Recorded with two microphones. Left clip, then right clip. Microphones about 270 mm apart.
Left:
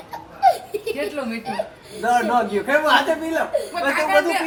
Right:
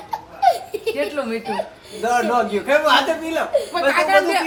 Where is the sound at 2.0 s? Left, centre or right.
Centre.